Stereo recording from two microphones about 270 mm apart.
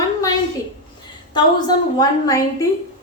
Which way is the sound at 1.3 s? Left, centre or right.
Centre.